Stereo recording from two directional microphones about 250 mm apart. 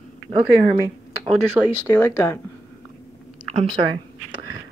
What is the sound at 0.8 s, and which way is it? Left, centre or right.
Speech, centre.